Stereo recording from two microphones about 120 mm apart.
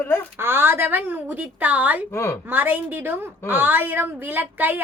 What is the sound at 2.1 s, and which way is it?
Speech, 25° left (ahead or behind).